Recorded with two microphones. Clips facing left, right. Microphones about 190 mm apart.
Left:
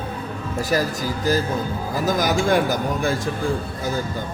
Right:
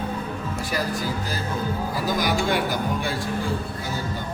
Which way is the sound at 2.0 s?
45° left (ahead or behind).